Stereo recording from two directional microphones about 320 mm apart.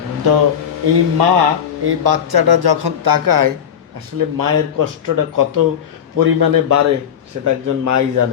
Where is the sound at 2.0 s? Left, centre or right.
Right.